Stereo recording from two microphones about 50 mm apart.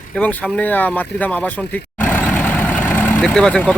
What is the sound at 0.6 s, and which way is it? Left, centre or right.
Speech, left.